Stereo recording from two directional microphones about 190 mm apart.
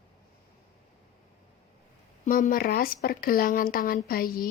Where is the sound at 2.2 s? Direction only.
45° left (ahead or behind).